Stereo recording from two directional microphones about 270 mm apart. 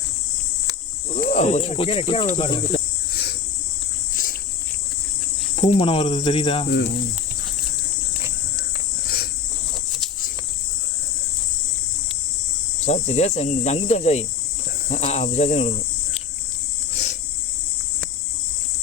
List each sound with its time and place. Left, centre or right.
1.1 s speech: left
5.5 s speech: left
12.8 s speech: left
16.9 s a sound: left